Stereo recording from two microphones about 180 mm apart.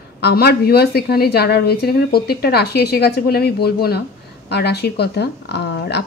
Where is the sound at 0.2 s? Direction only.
60° left (ahead or behind).